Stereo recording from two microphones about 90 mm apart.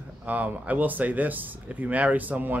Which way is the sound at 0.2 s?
15° right (ahead or behind).